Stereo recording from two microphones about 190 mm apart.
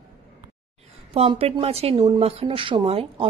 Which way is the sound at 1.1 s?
30° right (ahead or behind).